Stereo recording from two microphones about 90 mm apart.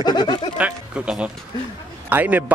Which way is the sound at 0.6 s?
15° right (ahead or behind).